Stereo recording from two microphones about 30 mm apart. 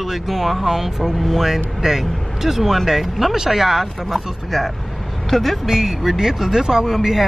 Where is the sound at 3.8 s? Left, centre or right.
Centre.